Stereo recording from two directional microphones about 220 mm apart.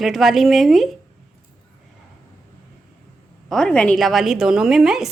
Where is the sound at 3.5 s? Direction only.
5° left (ahead or behind).